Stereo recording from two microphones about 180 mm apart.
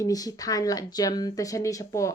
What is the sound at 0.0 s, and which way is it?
A woman's voice, 20° left (ahead or behind).